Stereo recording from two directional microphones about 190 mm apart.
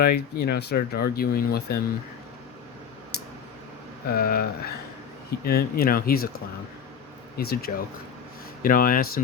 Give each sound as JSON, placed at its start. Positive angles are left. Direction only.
{"t": 0.0, "sound": "speech", "side_deg": 55}
{"t": 3.1, "sound": "a sound", "side_deg": 55}
{"t": 4.1, "sound": "speech", "side_deg": 50}
{"t": 7.3, "sound": "speech", "side_deg": 55}